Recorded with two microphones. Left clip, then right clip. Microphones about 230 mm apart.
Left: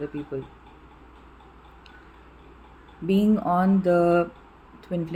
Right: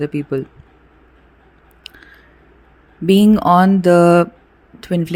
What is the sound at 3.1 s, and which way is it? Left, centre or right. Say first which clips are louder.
Speech: right 11 dB; right.